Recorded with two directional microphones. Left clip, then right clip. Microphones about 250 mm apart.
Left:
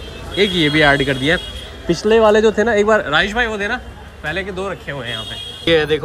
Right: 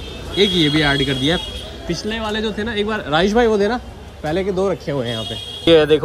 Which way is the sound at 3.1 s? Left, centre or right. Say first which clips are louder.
Right 2 dB; centre.